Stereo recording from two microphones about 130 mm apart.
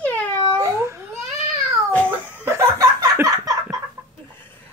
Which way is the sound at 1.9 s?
10° left (ahead or behind).